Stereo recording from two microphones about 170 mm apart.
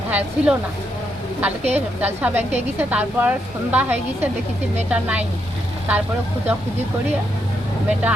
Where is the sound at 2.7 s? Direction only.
10° right (ahead or behind).